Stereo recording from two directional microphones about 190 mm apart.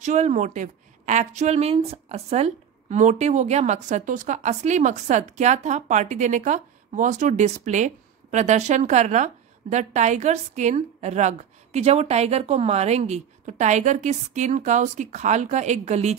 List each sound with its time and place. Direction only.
0.0 s a woman's voice: 35° right (ahead or behind)